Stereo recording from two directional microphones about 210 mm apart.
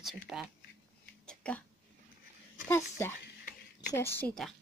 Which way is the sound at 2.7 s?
10° left (ahead or behind).